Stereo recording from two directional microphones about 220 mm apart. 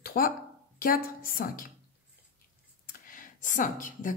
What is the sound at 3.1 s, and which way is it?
A woman's voice, 35° left (ahead or behind).